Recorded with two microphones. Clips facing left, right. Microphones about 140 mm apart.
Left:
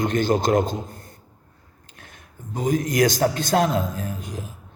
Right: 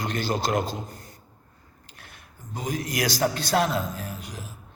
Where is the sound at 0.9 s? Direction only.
50° left (ahead or behind).